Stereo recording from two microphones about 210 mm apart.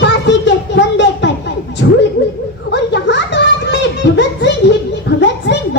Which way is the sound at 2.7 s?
55° left (ahead or behind).